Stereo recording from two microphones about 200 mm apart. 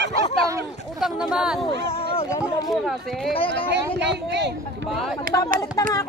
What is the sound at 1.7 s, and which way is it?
Speech, 30° left (ahead or behind).